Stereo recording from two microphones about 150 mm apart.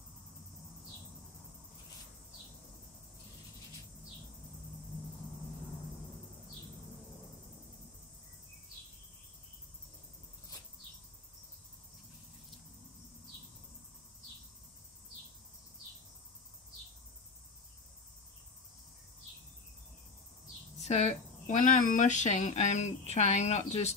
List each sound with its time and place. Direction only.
20.8 s speech: 50° left (ahead or behind)